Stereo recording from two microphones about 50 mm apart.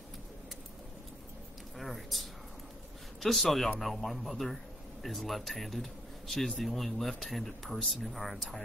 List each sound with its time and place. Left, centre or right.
1.8 s speech: centre